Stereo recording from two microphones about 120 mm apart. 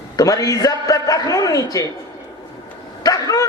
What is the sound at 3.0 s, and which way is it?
Bow-wow, 30° left (ahead or behind).